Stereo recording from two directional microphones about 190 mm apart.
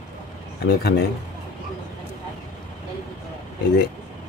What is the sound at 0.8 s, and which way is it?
Speech, 55° left (ahead or behind).